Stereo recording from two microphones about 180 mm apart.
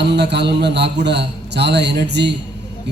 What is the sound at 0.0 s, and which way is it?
Speech, 70° right (ahead or behind).